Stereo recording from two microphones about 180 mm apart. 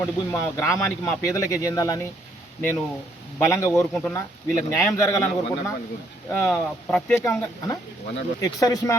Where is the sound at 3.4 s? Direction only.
15° left (ahead or behind).